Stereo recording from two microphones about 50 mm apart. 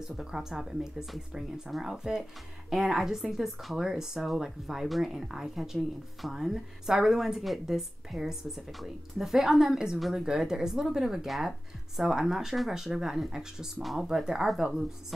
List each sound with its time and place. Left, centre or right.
0.2 s speech: centre
9.9 s speech: centre
10.2 s speech: centre